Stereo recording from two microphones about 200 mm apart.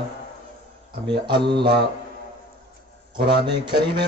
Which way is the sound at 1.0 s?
25° right (ahead or behind).